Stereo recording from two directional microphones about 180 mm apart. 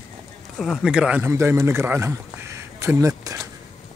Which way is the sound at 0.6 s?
Centre (ahead or behind).